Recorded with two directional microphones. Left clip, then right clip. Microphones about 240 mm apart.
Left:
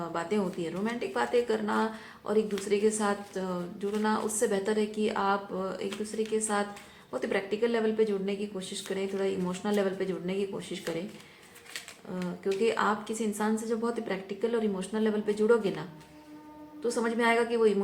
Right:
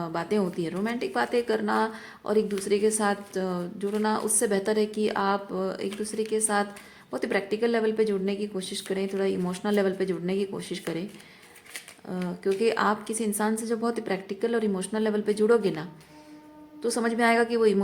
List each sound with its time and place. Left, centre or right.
0.0 s a woman's voice: right
12.1 s a woman's voice: right